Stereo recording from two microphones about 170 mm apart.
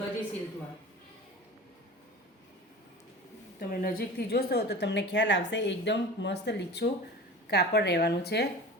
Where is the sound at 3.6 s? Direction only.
60° left (ahead or behind).